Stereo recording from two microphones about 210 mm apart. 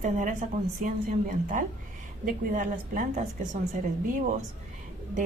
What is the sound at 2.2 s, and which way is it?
A woman's voice, 40° right (ahead or behind).